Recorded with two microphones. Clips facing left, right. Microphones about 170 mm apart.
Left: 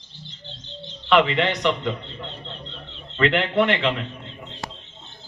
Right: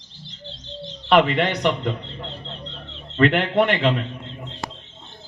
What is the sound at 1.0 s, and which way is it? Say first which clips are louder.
Speech: right 1 dB; 45° right (ahead or behind).